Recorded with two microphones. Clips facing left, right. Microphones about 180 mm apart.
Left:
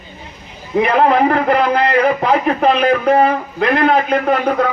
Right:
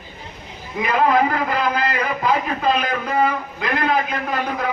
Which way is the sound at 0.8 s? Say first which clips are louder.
Left 5 dB; 65° left (ahead or behind).